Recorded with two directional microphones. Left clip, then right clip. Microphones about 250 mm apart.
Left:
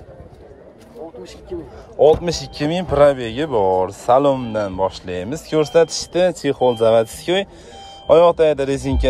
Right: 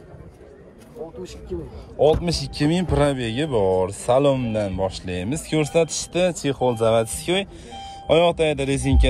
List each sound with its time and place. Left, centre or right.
1.2 s a man's voice: left
2.2 s speech: centre